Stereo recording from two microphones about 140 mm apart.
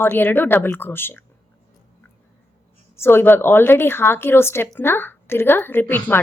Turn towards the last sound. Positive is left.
turn(degrees=10)  # may be behind; listen again after turning